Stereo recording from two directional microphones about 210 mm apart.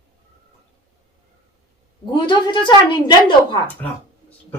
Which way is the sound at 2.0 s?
20° left (ahead or behind).